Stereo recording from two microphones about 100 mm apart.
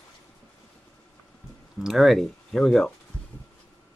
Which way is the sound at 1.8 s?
Centre (ahead or behind).